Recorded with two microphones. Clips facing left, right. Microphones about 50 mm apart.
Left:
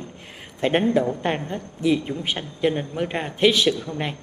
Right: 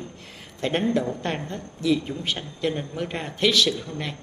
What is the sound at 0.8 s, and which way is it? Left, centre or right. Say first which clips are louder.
A woman's voice: left 4 dB; centre.